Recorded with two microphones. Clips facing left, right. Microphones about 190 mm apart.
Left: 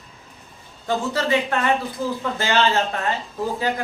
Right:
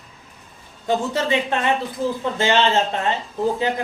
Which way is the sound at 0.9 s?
20° right (ahead or behind).